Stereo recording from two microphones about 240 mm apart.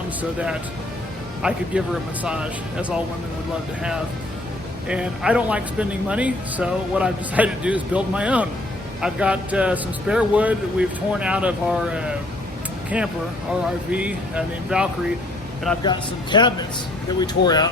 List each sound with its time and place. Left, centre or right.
0.2 s speech: centre
4.9 s speech: centre
15.8 s speech: centre